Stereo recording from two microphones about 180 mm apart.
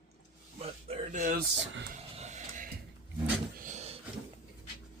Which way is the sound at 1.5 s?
85° right.